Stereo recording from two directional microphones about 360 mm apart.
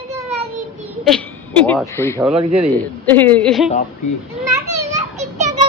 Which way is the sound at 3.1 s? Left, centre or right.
Centre.